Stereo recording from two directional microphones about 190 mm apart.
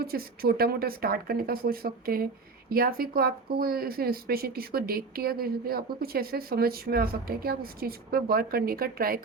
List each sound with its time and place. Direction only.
0.0 s speech: 55° right (ahead or behind)